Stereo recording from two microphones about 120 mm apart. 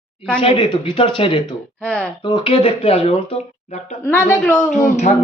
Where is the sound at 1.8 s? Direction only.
10° left (ahead or behind).